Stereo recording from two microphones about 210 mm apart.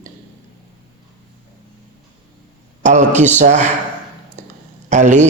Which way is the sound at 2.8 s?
35° right (ahead or behind).